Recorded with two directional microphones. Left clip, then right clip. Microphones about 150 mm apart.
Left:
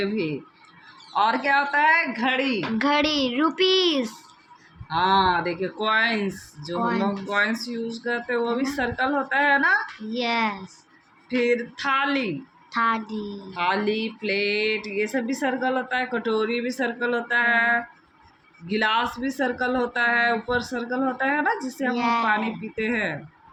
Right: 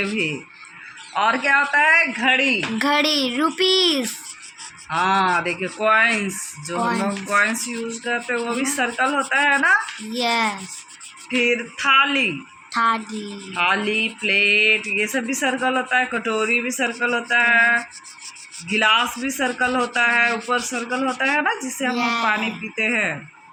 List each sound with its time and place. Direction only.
1.1 s a child's voice: 20° right (ahead or behind); by 4.1 s centre (ahead or behind)
4.9 s speech: 20° right (ahead or behind)
11.3 s speech: 25° right (ahead or behind)
12.7 s speech: 10° right (ahead or behind)
13.5 s speech: 25° right (ahead or behind)
21.8 s a child's voice: 5° right (ahead or behind)
22.7 s speech: 20° right (ahead or behind)